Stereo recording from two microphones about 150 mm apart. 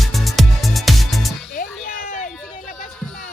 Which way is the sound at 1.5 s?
60° left (ahead or behind).